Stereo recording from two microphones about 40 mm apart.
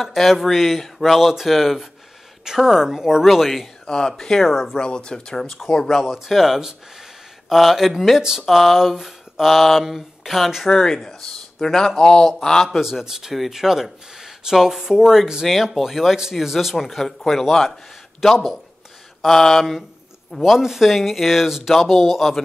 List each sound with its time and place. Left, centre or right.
0.0 s speech: centre
3.3 s speech: centre
3.8 s speech: centre
4.2 s mantra: centre
4.5 s speech: centre
4.7 s speech: left
6.0 s speech: centre
10.7 s speech: centre
13.0 s speech: centre
15.4 s speech: centre
19.2 s mantra: centre
20.4 s speech: centre
21.7 s speech: centre